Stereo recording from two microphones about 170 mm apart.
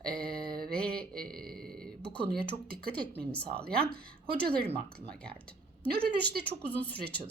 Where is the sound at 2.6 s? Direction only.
65° right (ahead or behind).